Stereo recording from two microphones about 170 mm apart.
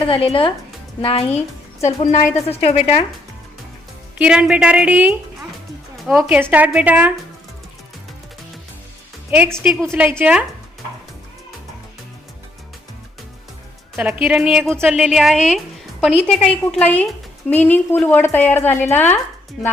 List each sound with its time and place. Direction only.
0.1 s a woman's voice: 30° left (ahead or behind)
1.3 s music: 10° left (ahead or behind)
2.0 s a woman's voice: 40° left (ahead or behind)
4.2 s a woman's voice: 5° right (ahead or behind)
9.3 s a woman's voice: 10° right (ahead or behind)
13.9 s a woman's voice: 15° right (ahead or behind)
15.5 s music: centre (ahead or behind)
16.5 s a woman's voice: 10° left (ahead or behind)